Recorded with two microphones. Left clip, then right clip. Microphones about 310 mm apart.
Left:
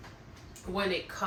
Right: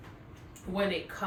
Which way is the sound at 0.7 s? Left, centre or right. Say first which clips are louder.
Even; left.